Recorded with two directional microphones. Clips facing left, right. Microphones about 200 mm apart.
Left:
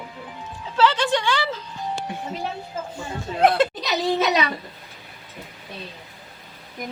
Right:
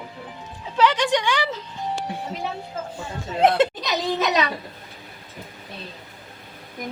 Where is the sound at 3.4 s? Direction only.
20° right (ahead or behind).